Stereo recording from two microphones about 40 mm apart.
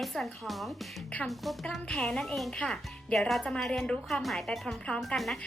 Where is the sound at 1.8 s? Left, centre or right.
Left.